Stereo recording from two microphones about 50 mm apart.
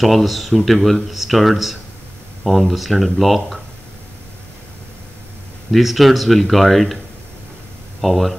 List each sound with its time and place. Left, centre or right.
0.0 s speech: centre
5.7 s speech: centre
8.0 s speech: centre